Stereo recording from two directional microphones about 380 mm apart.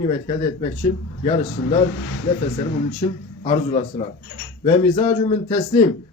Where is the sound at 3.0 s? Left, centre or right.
Centre.